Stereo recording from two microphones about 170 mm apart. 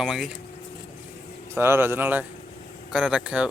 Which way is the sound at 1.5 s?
15° right (ahead or behind).